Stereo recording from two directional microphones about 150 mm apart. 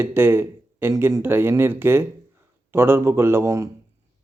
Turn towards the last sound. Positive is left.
turn(degrees=-20)  # may be behind; listen again after turning